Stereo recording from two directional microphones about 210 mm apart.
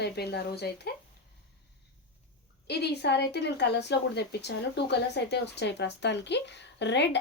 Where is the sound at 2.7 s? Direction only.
50° left (ahead or behind).